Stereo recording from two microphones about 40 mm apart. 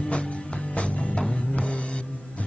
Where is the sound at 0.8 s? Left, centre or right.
Left.